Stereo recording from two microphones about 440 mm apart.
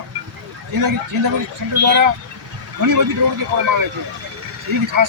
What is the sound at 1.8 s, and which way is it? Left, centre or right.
Speech, right.